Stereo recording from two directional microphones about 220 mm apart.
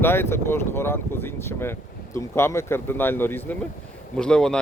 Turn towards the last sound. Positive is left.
turn(degrees=5)  # may be behind; listen again after turning